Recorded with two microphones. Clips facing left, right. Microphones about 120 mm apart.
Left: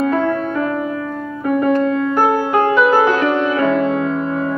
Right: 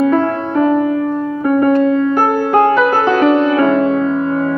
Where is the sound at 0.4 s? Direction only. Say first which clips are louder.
Right 6 dB; 25° right (ahead or behind).